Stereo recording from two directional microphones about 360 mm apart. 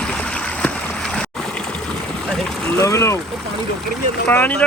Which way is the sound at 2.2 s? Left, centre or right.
Centre.